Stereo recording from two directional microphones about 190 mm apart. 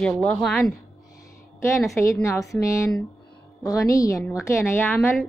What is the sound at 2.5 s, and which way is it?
A woman's voice, 15° left (ahead or behind).